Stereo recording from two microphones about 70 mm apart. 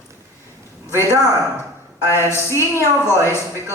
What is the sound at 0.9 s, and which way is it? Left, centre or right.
A man's voice, left.